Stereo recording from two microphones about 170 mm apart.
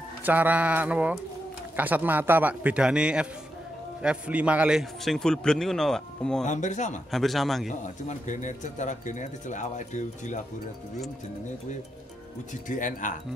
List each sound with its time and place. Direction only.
0.2 s a man's voice: 10° right (ahead or behind)
6.4 s speech: 45° left (ahead or behind)
7.1 s a man's voice: centre (ahead or behind)
7.8 s speech: 45° left (ahead or behind)
12.6 s speech: 50° left (ahead or behind)